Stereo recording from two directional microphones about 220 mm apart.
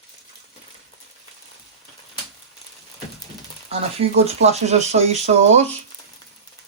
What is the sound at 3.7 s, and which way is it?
Speech, 30° right (ahead or behind).